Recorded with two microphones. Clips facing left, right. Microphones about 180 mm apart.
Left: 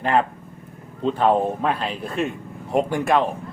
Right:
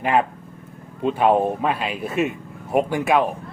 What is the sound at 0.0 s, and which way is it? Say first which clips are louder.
Speech: even; 10° right (ahead or behind).